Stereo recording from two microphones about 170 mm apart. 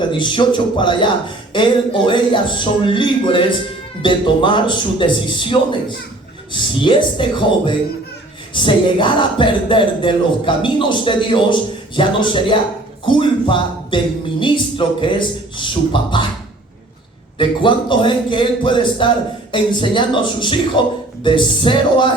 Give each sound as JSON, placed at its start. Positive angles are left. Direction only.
{"t": 0.1, "sound": "speech", "side_deg": 30}
{"t": 17.3, "sound": "speech", "side_deg": 30}